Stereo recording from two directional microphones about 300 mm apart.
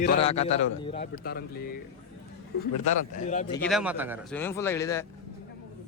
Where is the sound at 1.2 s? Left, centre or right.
Left.